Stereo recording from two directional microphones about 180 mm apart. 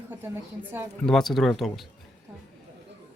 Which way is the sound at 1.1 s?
Centre (ahead or behind).